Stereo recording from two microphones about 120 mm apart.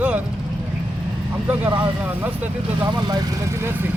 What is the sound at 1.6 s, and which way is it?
Speech, 20° right (ahead or behind).